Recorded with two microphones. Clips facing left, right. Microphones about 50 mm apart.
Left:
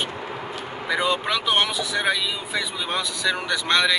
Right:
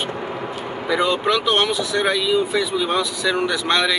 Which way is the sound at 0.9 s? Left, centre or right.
Centre.